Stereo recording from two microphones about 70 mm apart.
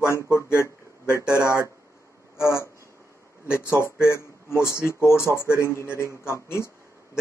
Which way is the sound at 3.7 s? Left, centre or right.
Left.